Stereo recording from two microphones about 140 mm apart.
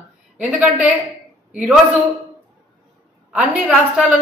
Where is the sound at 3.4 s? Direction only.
10° right (ahead or behind).